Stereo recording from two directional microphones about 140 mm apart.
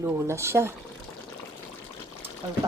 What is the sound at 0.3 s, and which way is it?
Speech, 20° right (ahead or behind).